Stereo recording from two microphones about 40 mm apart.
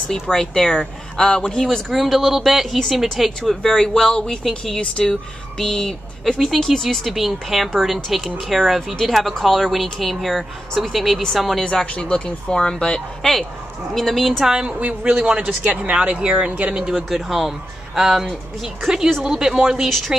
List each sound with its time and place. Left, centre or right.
0.1 s speech: centre
2.0 s speech: centre
4.1 s speech: left
4.4 s speech: centre
4.7 s speech: left
6.3 s speech: centre
11.6 s speech: left
13.2 s speech: centre
14.4 s speech: centre
14.8 s a man's voice: right
15.2 s a man's voice: right
17.1 s speech: centre
19.2 s speech: centre